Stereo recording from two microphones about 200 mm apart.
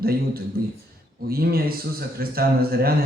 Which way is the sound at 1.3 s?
50° right (ahead or behind).